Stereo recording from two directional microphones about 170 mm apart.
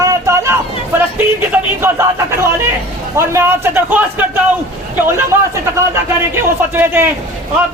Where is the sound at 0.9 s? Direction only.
15° right (ahead or behind).